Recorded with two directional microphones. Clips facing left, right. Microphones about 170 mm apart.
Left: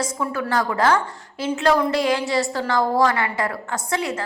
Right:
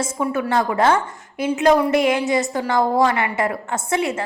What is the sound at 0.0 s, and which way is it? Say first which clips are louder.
A woman's voice: right 3 dB; 25° right (ahead or behind).